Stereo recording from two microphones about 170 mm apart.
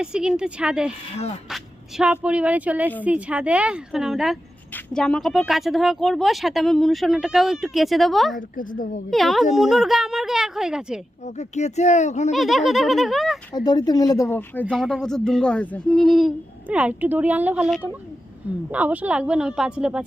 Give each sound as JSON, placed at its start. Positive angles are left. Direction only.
{"t": 0.0, "sound": "speech", "side_deg": -5}
{"t": 1.1, "sound": "speech", "side_deg": 35}
{"t": 1.5, "sound": "speech", "side_deg": -5}
{"t": 8.4, "sound": "speech", "side_deg": 50}
{"t": 9.0, "sound": "speech", "side_deg": 0}
{"t": 11.3, "sound": "speech", "side_deg": 40}
{"t": 12.3, "sound": "speech", "side_deg": 0}
{"t": 13.7, "sound": "speech", "side_deg": 25}